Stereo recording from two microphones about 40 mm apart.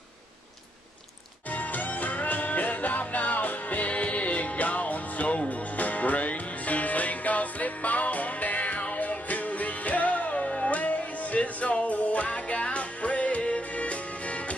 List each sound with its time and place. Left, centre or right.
1.5 s music: left